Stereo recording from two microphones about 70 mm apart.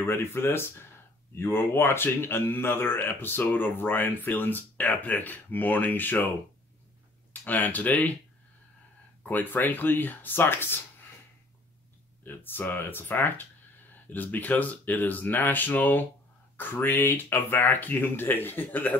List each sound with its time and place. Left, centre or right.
0.0 s speech: left
7.4 s speech: left
9.2 s speech: left
12.3 s speech: left